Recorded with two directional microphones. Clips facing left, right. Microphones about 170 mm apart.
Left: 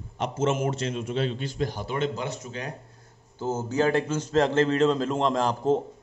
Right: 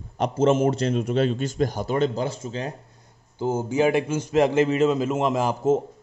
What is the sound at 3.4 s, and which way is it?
A man's voice, 10° right (ahead or behind).